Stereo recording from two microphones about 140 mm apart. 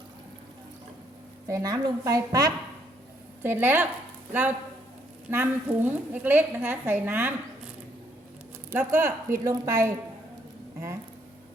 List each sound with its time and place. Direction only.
1.5 s speech: 25° right (ahead or behind)
3.4 s speech: 15° right (ahead or behind)
8.7 s speech: 15° right (ahead or behind)